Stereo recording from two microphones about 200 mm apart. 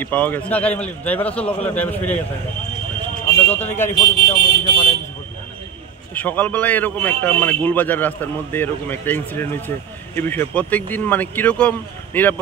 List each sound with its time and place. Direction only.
0.0 s a man's voice: 10° left (ahead or behind)
3.3 s a sound: 10° left (ahead or behind)
3.7 s a man's voice: 10° left (ahead or behind)
6.1 s a man's voice: 10° left (ahead or behind)